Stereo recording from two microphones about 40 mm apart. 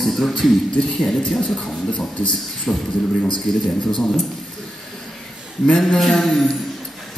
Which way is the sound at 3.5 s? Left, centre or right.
Centre.